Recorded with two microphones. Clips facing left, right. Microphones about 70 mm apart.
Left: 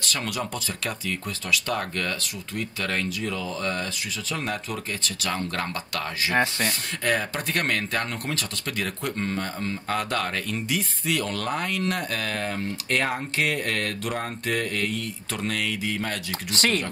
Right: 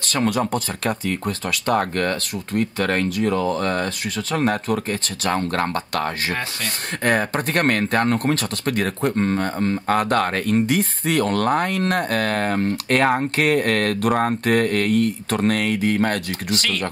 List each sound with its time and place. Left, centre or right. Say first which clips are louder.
0.0 s speech: right 9 dB; right
16.5 s speech: left 1 dB; left